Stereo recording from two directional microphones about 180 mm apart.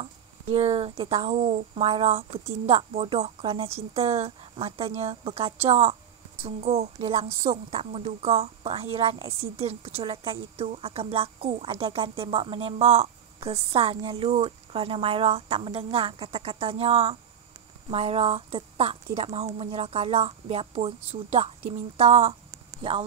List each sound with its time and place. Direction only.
0.0 s a woman's voice: 30° right (ahead or behind)